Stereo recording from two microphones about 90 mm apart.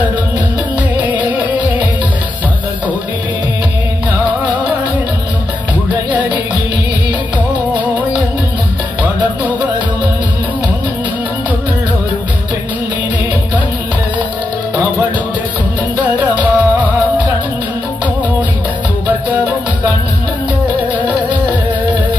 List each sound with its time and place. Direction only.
7.7 s music: 20° right (ahead or behind)
16.2 s music: 20° right (ahead or behind)
19.0 s music: 15° right (ahead or behind)